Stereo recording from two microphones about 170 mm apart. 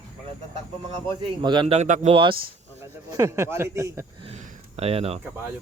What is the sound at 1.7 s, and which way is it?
Speech, 45° right (ahead or behind).